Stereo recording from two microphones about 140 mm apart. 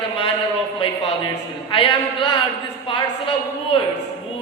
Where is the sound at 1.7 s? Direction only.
40° left (ahead or behind).